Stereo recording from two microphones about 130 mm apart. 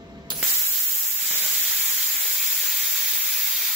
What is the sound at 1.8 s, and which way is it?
Steam, centre (ahead or behind).